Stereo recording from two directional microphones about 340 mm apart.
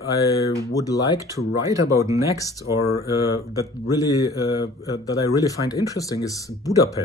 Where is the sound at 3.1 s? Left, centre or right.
Centre.